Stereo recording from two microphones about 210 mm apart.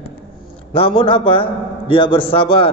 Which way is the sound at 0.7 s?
25° left (ahead or behind).